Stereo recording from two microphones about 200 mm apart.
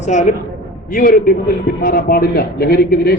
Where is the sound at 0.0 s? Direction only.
35° left (ahead or behind).